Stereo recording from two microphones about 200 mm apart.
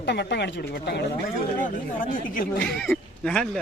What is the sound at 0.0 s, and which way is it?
Speech, 60° left (ahead or behind).